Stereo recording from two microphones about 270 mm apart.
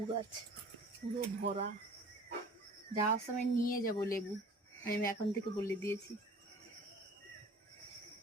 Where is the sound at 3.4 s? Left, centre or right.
Left.